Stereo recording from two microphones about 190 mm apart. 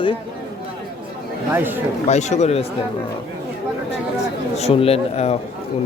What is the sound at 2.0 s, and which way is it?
Speech, 35° left (ahead or behind).